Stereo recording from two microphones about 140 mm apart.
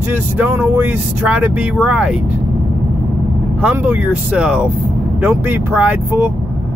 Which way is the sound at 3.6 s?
10° right (ahead or behind).